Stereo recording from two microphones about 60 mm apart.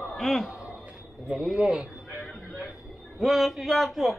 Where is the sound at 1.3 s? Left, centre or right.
Centre.